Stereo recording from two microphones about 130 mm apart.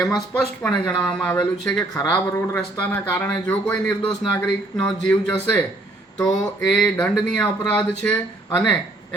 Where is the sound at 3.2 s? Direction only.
10° left (ahead or behind).